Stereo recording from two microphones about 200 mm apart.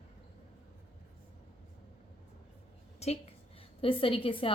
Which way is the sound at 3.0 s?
30° left (ahead or behind).